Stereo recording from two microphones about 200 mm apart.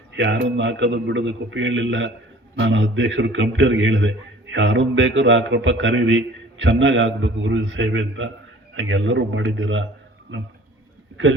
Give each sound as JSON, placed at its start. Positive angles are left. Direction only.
{"t": 0.1, "sound": "a man's voice", "side_deg": -65}